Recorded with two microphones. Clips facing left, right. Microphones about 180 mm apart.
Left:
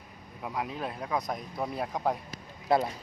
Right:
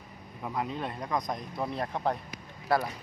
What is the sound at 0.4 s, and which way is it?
Speech, 5° left (ahead or behind).